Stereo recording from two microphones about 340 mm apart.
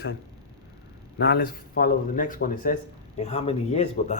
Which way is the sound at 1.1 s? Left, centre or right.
Left.